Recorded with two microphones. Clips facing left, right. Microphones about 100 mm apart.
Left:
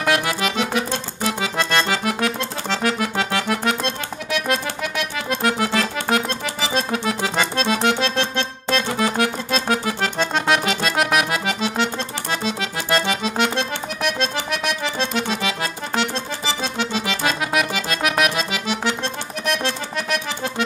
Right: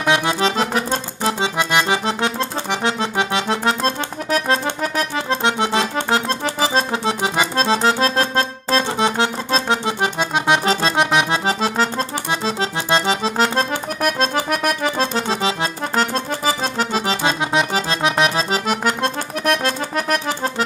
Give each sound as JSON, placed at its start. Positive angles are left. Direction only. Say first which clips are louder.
{"t": 0.0, "sound": "accordion", "louder": "right 3 dB", "side_deg": -20}
{"t": 1.6, "sound": "accordion", "louder": "right 2 dB", "side_deg": -15}
{"t": 2.0, "sound": "music", "louder": "right 2 dB", "side_deg": -25}
{"t": 7.5, "sound": "accordion", "louder": "right 3 dB", "side_deg": -30}
{"t": 10.6, "sound": "accordion", "louder": "right 3 dB", "side_deg": -30}